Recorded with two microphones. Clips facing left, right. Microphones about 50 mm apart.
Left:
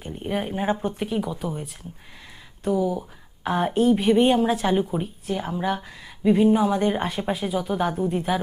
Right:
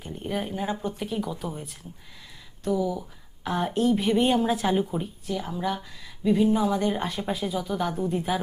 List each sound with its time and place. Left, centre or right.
0.0 s speech: left
2.6 s speech: left; by 5.0 s centre
5.2 s speech: left; by 8.4 s centre